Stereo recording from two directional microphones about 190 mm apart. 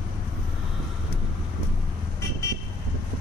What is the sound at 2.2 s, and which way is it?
Vehicle, 15° left (ahead or behind).